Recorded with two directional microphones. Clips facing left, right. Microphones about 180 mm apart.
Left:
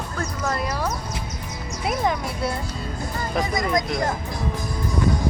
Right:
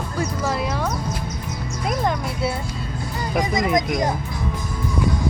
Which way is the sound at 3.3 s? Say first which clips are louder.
Right 3 dB; 15° right (ahead or behind).